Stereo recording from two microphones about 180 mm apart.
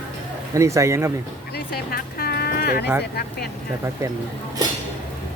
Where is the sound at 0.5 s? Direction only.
15° right (ahead or behind).